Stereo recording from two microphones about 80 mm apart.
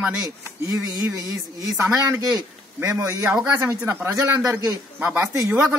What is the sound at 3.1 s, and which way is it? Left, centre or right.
A man's voice, right.